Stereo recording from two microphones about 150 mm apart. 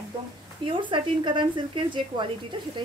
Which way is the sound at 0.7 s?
35° right (ahead or behind).